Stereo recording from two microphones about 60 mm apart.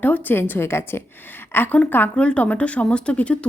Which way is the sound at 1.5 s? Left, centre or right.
Left.